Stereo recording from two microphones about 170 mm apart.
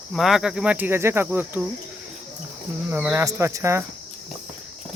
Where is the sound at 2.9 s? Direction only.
10° right (ahead or behind).